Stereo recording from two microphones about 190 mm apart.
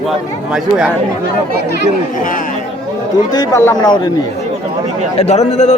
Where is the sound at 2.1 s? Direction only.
45° left (ahead or behind).